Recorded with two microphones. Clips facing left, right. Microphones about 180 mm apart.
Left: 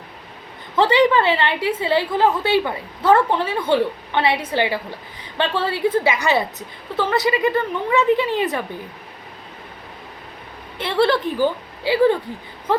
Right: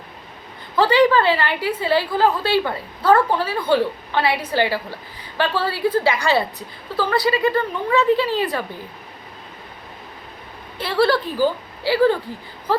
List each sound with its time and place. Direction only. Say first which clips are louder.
0.8 s a woman's voice: even; 25° left (ahead or behind)
10.8 s a woman's voice: even; 25° left (ahead or behind)